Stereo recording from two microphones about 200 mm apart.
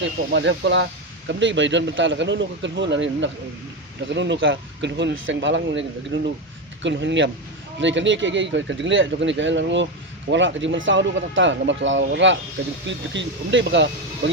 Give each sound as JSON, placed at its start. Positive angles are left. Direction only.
{"t": 0.0, "sound": "a man's voice", "side_deg": -65}